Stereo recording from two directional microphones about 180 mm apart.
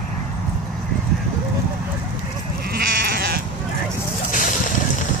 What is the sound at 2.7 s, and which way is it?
Goat, 55° right (ahead or behind).